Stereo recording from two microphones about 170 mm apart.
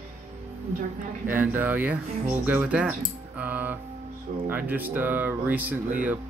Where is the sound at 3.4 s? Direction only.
10° right (ahead or behind).